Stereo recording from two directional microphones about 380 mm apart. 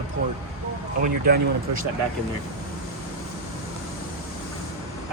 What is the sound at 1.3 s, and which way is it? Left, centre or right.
Speech, right.